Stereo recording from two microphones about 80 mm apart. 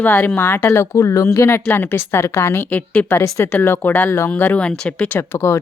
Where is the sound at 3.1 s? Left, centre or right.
Left.